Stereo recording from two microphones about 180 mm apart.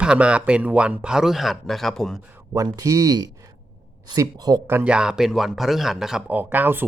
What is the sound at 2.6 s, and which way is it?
Speech, 20° right (ahead or behind).